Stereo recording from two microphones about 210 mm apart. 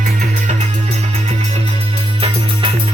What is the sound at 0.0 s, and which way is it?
Music, 40° right (ahead or behind).